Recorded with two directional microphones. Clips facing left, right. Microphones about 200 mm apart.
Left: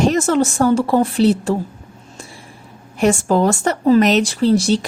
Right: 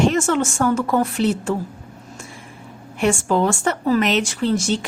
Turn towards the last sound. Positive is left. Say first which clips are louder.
# left 5 dB
turn(degrees=35)  # may be behind; listen again after turning